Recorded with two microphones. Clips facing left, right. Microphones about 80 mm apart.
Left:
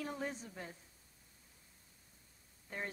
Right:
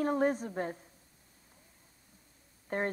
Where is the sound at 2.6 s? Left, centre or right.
Right.